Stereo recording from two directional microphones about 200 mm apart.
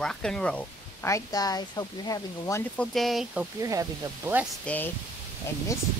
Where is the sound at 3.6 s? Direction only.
15° right (ahead or behind).